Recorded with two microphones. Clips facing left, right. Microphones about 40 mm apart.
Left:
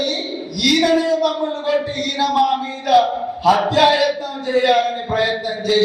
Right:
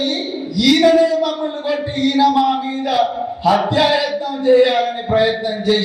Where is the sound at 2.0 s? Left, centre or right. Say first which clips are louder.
Right 6 dB; centre.